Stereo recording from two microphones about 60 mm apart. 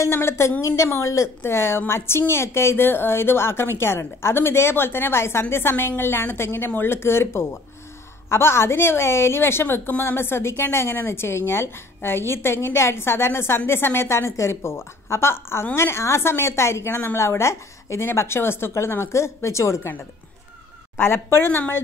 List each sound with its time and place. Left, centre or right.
0.0 s a woman's voice: left
1.4 s a woman's voice: left
20.9 s a woman's voice: left